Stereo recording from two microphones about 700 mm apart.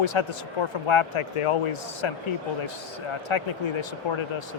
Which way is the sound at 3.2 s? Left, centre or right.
Left.